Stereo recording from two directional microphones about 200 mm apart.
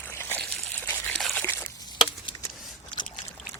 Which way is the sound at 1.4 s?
15° left (ahead or behind).